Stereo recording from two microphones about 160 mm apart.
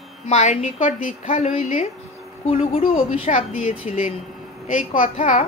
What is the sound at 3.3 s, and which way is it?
A woman's voice, 45° left (ahead or behind).